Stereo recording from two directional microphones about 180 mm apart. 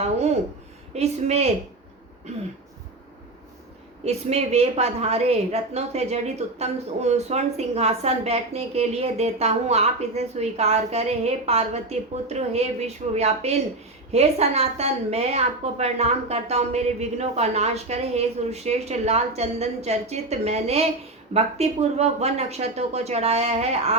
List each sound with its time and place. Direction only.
0.0 s a woman's voice: 35° right (ahead or behind)
4.0 s a woman's voice: 35° right (ahead or behind)